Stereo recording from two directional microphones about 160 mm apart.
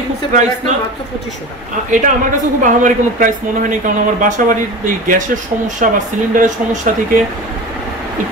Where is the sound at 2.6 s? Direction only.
55° right (ahead or behind).